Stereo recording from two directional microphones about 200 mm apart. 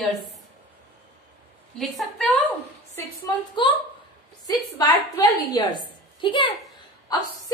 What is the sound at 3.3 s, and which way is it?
Speech, 25° left (ahead or behind).